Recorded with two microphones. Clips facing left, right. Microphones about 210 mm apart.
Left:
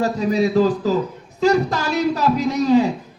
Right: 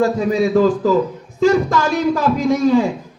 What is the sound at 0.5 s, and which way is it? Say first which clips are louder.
Speech: right 3 dB; 50° right (ahead or behind).